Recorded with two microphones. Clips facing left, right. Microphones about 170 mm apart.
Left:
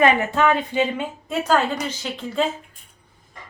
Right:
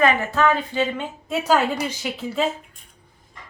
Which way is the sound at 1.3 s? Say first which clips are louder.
Right 1 dB; 5° right (ahead or behind).